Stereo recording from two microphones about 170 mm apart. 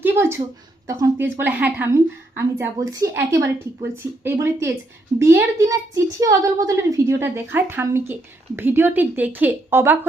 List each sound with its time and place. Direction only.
0.0 s a child's voice: 15° right (ahead or behind)